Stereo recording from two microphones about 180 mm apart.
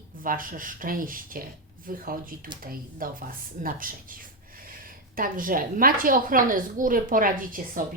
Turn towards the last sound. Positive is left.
turn(degrees=-45)  # may be behind; listen again after turning